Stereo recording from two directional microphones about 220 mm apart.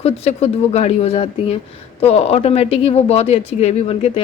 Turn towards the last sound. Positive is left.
turn(degrees=30)  # may be behind; listen again after turning